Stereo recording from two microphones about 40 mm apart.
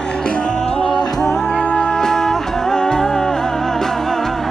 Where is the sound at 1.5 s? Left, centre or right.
Left.